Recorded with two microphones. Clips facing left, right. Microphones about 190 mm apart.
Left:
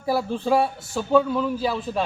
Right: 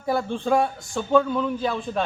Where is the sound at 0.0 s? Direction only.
5° left (ahead or behind).